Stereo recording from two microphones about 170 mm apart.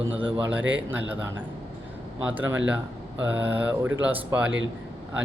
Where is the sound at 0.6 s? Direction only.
90° right.